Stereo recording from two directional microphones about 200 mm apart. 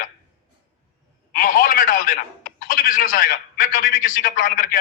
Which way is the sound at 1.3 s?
45° left (ahead or behind).